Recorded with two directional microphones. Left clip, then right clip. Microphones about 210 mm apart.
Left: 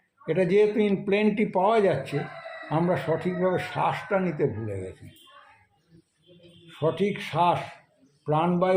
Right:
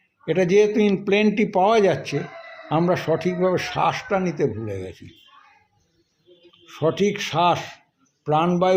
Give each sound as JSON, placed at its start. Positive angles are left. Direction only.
{"t": 0.3, "sound": "speech", "side_deg": -40}
{"t": 6.7, "sound": "speech", "side_deg": -40}